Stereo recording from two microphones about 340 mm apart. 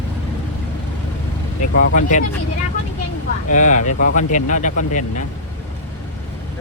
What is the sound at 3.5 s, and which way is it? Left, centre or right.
Speech, left.